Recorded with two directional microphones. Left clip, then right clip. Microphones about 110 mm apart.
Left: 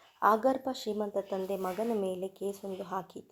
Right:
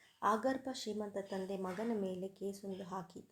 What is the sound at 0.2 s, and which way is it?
A woman's voice, 25° left (ahead or behind).